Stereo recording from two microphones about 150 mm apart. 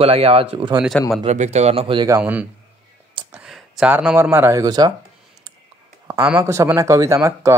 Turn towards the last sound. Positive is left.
turn(degrees=-20)  # may be behind; listen again after turning